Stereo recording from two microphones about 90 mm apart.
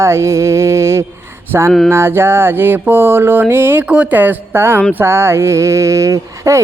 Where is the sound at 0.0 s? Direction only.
30° right (ahead or behind).